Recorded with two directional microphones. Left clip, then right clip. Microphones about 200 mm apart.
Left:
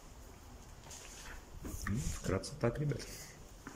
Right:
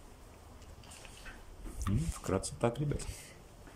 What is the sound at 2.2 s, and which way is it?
Speech, 10° right (ahead or behind).